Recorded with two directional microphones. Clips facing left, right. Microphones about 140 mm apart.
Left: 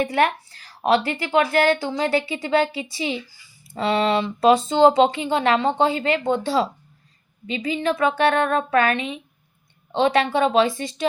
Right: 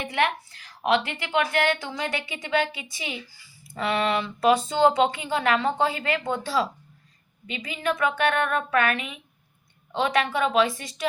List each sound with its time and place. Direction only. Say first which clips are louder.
0.0 s a woman's voice: left 5 dB; 40° left (ahead or behind)